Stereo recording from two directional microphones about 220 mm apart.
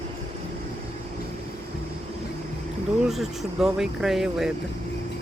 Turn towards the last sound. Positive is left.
turn(degrees=0)  # may be behind; listen again after turning